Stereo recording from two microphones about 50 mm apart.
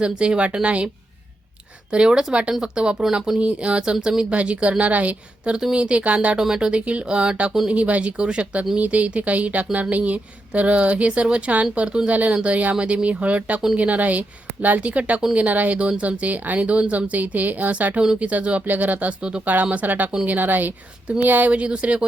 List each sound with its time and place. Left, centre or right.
0.0 s a woman's voice: centre
1.9 s a woman's voice: centre; by 21.5 s right
21.5 s a woman's voice: right